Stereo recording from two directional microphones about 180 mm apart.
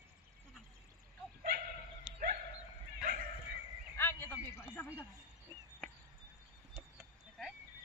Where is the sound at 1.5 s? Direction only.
60° right (ahead or behind).